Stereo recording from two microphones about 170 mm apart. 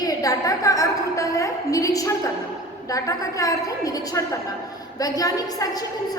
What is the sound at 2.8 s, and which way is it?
A woman's voice, 20° left (ahead or behind).